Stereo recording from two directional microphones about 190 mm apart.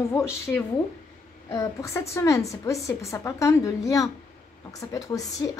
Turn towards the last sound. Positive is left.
turn(degrees=20)  # may be behind; listen again after turning